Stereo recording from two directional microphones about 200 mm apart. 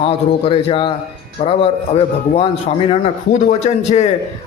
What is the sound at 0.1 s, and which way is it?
A man's voice, 25° left (ahead or behind).